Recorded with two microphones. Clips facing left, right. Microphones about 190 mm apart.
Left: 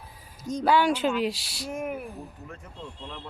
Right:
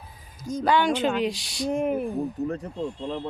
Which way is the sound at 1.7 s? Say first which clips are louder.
Right 7 dB; 30° right (ahead or behind).